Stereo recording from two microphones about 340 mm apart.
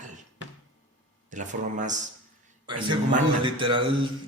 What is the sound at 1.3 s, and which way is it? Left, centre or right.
Speech, right.